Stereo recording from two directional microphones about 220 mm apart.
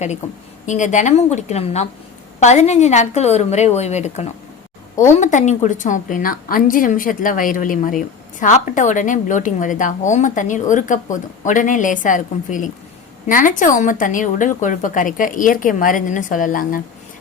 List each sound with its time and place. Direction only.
0.6 s a woman's voice: 35° left (ahead or behind)